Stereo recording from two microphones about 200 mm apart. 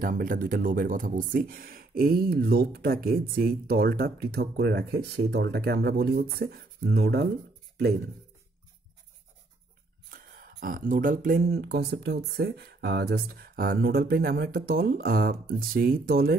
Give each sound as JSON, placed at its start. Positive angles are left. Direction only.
{"t": 0.0, "sound": "speech", "side_deg": -45}
{"t": 10.1, "sound": "speech", "side_deg": -45}